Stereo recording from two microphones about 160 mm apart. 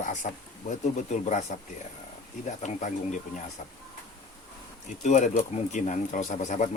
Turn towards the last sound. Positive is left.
turn(degrees=50)  # may be behind; listen again after turning